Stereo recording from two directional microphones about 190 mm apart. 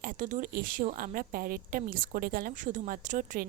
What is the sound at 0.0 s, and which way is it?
A woman's voice, 45° right (ahead or behind).